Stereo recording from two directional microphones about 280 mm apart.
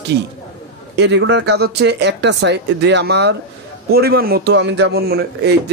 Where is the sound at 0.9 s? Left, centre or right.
Right.